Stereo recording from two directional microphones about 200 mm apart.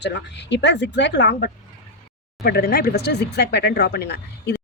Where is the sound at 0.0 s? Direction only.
60° left (ahead or behind).